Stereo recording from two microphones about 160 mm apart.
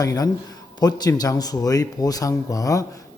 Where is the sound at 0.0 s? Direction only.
20° left (ahead or behind).